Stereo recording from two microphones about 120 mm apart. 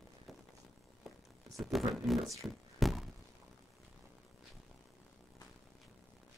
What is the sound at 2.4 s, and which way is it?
Thunk, centre (ahead or behind).